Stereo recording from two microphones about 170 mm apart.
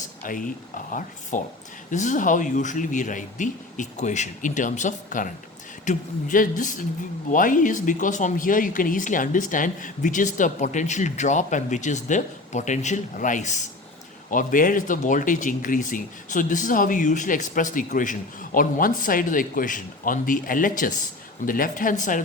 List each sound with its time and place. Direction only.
0.2 s speech: 55° left (ahead or behind)